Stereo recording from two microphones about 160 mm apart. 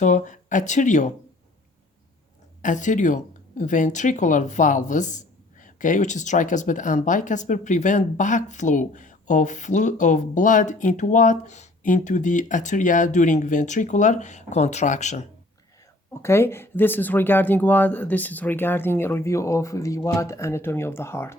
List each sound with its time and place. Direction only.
0.0 s speech: 50° left (ahead or behind)
2.6 s speech: 50° left (ahead or behind)
16.2 s speech: 15° left (ahead or behind)